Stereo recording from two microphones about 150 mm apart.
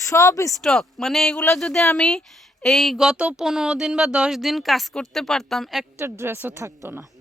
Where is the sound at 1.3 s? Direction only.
15° left (ahead or behind).